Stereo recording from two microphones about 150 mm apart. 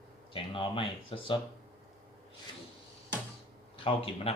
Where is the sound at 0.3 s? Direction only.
35° left (ahead or behind).